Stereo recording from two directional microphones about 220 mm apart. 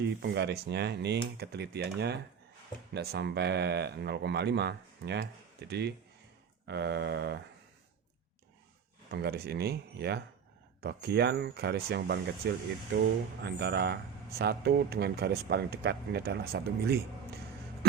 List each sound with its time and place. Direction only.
0.0 s speech: 50° right (ahead or behind)
9.0 s speech: 45° right (ahead or behind)